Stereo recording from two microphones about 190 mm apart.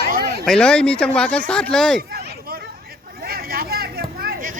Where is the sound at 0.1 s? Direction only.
55° right (ahead or behind).